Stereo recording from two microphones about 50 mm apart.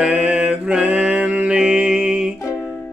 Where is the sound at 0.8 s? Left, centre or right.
Right.